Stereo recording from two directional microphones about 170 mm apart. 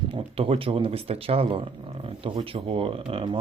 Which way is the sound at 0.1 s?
35° right (ahead or behind).